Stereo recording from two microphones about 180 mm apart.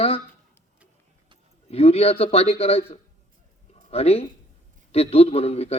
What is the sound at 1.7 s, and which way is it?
A man's voice, 35° left (ahead or behind).